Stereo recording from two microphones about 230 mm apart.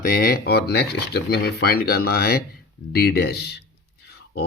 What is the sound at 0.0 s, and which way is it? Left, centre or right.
Speech, left.